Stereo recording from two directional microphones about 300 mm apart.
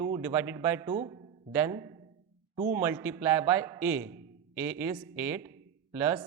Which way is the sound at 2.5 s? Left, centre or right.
Right.